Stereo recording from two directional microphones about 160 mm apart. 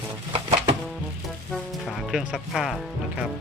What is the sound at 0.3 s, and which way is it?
Music, 35° right (ahead or behind).